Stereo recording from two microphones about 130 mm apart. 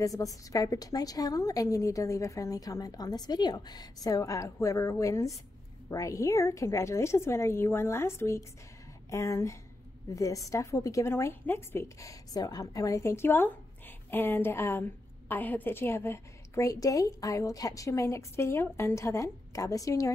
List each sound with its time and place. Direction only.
0.0 s a woman's voice: 25° left (ahead or behind)